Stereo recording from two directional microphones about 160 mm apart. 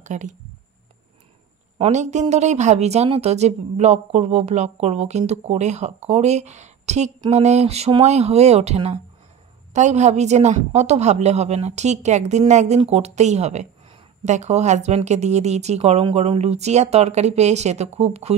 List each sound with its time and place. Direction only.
0.0 s speech: 50° right (ahead or behind)
1.8 s a woman's voice: 45° right (ahead or behind)